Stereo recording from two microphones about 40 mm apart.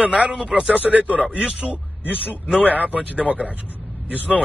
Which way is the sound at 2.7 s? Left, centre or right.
Right.